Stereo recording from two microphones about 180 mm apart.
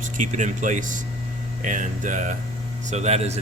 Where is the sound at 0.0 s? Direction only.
45° right (ahead or behind).